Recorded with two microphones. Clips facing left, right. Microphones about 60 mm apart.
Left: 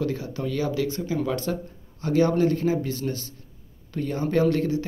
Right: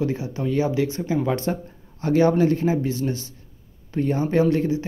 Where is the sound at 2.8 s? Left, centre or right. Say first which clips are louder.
Right 4 dB; right.